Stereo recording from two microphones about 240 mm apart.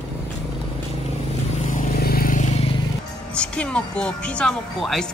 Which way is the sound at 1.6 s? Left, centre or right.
Left.